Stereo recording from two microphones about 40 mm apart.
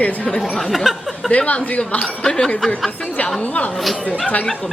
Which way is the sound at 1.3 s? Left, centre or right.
Left.